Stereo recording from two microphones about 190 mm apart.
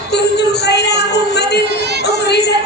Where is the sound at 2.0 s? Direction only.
60° left (ahead or behind).